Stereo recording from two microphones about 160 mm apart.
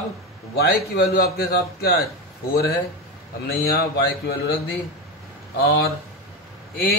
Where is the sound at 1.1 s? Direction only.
75° left (ahead or behind).